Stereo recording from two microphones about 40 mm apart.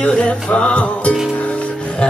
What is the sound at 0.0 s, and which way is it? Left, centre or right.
Music, left.